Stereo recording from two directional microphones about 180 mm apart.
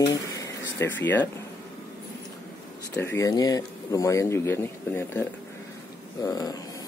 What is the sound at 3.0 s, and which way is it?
Speech, 15° left (ahead or behind).